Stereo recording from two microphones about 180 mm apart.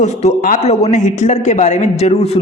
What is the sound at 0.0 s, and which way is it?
A man's voice, 40° left (ahead or behind).